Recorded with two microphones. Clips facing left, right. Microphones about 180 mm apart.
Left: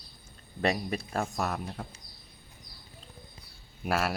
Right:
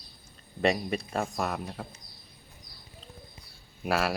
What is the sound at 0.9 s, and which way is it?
Speech, centre (ahead or behind).